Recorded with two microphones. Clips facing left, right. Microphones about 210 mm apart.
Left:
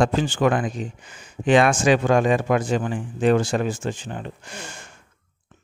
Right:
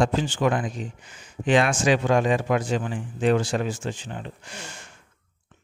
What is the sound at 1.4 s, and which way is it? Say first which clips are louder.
A man's voice: left 3 dB; 55° left (ahead or behind).